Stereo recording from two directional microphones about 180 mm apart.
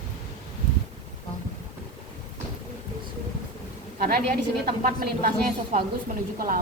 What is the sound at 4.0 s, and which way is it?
A woman's voice, 60° right (ahead or behind).